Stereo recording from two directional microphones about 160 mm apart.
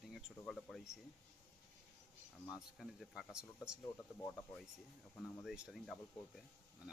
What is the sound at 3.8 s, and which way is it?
Speech, 20° left (ahead or behind).